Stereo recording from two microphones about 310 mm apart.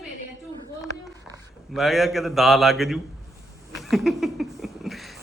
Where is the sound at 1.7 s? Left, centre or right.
Centre.